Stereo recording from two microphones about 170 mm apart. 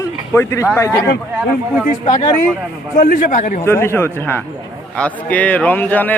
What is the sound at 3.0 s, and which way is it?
Speech, 55° left (ahead or behind).